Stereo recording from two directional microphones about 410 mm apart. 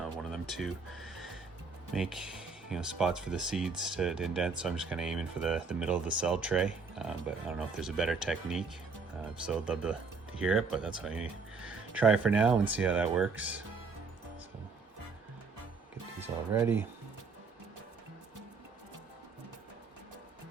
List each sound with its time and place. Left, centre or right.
0.0 s a sound: centre
1.9 s speech: centre
16.2 s speech: centre